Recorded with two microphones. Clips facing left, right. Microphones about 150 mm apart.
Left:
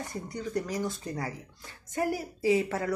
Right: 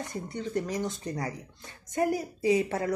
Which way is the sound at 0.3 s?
25° right (ahead or behind).